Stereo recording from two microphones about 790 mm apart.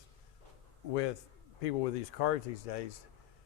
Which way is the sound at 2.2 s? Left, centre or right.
Left.